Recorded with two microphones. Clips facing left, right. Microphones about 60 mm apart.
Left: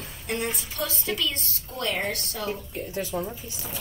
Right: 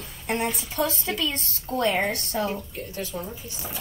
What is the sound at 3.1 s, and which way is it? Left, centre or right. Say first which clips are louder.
Speech: left 5 dB; left.